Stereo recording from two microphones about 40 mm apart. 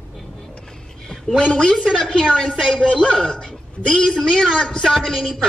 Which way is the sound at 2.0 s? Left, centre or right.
Centre.